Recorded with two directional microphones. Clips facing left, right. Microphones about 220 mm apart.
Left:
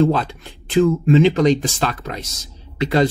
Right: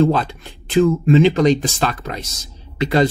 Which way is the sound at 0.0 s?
10° right (ahead or behind).